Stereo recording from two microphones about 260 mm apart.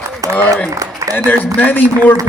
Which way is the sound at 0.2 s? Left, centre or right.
Centre.